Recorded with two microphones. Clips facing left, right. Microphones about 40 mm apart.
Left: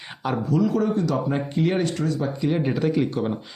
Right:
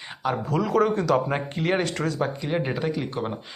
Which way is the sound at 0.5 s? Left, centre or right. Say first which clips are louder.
Even; right.